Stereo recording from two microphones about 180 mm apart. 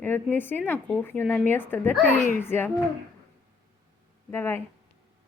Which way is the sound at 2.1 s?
45° left (ahead or behind).